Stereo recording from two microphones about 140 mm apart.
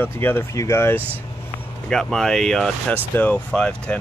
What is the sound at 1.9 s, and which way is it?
Speech, 5° left (ahead or behind).